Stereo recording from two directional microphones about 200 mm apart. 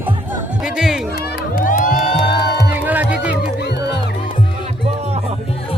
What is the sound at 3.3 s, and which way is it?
Music, 55° left (ahead or behind).